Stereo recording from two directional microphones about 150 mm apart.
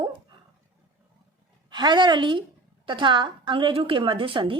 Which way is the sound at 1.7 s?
30° right (ahead or behind).